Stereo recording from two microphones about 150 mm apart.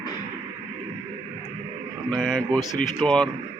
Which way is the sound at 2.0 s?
Centre (ahead or behind).